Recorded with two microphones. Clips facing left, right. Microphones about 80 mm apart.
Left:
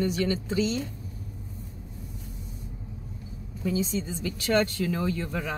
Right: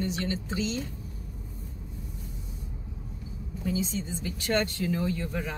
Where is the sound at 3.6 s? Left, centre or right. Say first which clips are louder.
Left 3 dB; left.